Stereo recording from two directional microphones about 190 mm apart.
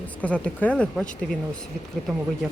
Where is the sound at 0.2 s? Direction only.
5° left (ahead or behind).